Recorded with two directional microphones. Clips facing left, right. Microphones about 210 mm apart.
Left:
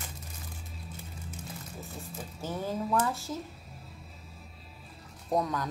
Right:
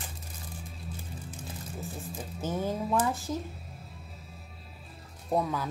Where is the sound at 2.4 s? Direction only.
20° right (ahead or behind).